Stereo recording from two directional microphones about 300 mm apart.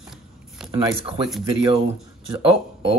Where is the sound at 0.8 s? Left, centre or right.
Centre.